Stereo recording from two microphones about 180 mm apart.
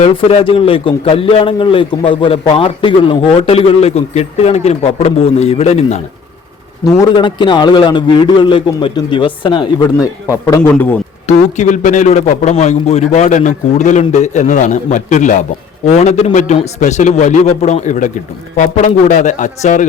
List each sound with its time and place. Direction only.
0.0 s a man's voice: 30° left (ahead or behind)
10.4 s a man's voice: 15° left (ahead or behind)
11.3 s a man's voice: 40° left (ahead or behind)